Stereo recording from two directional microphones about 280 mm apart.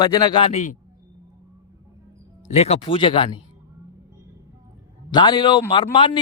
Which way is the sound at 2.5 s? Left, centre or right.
Left.